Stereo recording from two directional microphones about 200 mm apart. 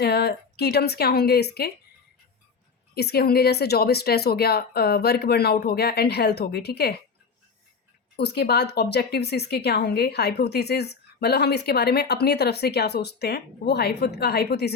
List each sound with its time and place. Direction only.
0.0 s speech: 55° left (ahead or behind)
2.9 s speech: 50° left (ahead or behind)
8.1 s speech: 55° left (ahead or behind)